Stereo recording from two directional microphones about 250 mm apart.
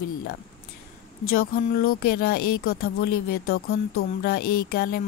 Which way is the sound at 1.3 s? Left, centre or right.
Left.